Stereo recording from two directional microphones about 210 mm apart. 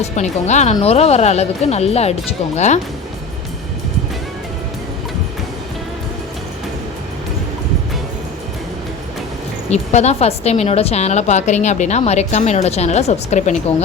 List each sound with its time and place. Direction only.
0.0 s a woman's voice: 35° left (ahead or behind)
9.6 s a woman's voice: 30° left (ahead or behind)